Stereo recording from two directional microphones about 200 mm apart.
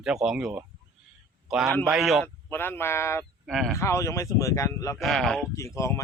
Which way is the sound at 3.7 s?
15° left (ahead or behind).